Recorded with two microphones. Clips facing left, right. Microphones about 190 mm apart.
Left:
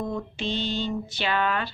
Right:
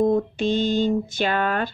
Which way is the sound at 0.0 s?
50° right (ahead or behind).